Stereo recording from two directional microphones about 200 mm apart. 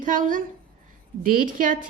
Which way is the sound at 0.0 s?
40° right (ahead or behind).